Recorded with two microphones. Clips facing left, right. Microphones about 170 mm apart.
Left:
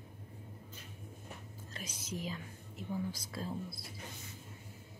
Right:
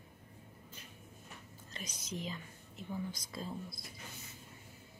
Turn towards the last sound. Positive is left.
turn(degrees=5)  # may be behind; listen again after turning